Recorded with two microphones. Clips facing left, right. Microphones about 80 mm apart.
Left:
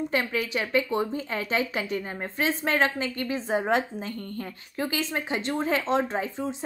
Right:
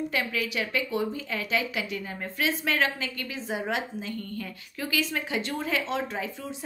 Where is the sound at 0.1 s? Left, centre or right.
Left.